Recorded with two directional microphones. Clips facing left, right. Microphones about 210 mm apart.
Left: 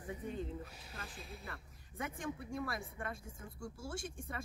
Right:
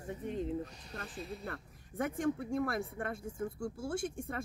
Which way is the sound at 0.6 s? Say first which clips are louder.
Right 5 dB; 5° left (ahead or behind).